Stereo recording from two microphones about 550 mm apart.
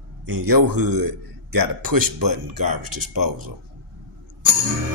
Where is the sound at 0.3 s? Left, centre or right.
Right.